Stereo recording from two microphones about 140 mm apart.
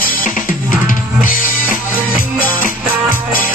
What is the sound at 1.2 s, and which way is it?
Music, 80° left.